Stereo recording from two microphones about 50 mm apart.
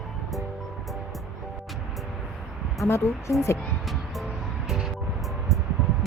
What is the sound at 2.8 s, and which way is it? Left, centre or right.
Speech, left.